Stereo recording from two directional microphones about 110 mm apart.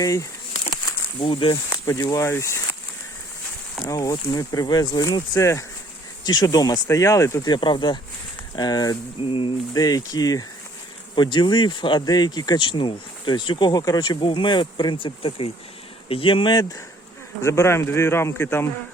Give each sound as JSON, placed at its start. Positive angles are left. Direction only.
{"t": 0.0, "sound": "speech", "side_deg": 30}
{"t": 1.2, "sound": "speech", "side_deg": 55}
{"t": 1.9, "sound": "a man's voice", "side_deg": 30}
{"t": 3.8, "sound": "speech", "side_deg": 30}
{"t": 9.2, "sound": "a sound", "side_deg": 55}
{"t": 9.7, "sound": "speech", "side_deg": 35}
{"t": 17.4, "sound": "a man's voice", "side_deg": 25}